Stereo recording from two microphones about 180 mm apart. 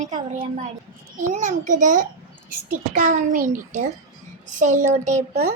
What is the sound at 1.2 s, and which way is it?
A child's voice, 45° right (ahead or behind).